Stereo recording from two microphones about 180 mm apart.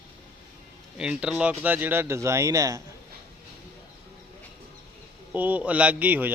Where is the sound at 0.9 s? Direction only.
5° right (ahead or behind).